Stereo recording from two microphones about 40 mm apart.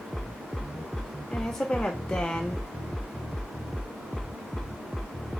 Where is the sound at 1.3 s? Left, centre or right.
Centre.